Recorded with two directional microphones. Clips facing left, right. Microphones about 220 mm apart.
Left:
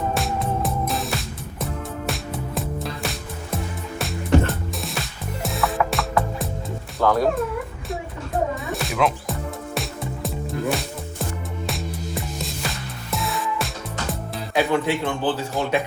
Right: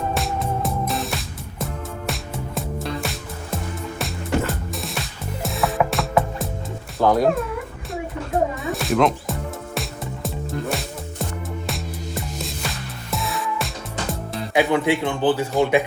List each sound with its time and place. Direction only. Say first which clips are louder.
0.1 s music: even; centre (ahead or behind)
7.0 s speech: right 2 dB; 15° right (ahead or behind)
8.6 s music: right 4 dB; centre (ahead or behind)
14.5 s speech: right 2 dB; 15° right (ahead or behind)